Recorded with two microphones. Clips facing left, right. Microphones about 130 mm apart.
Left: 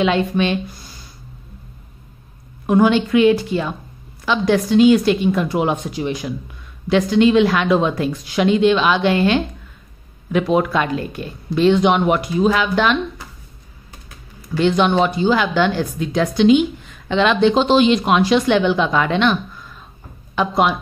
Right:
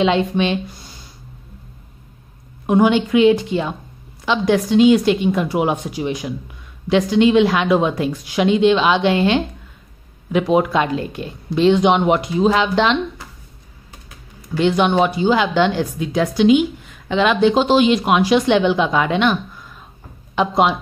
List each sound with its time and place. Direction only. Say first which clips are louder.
0.0 s speech: right 1 dB; 25° right (ahead or behind)
2.6 s speech: even; 20° right (ahead or behind)
14.6 s speech: even; 15° right (ahead or behind)